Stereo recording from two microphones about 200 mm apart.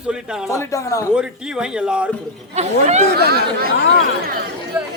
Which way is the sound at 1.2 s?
5° right (ahead or behind).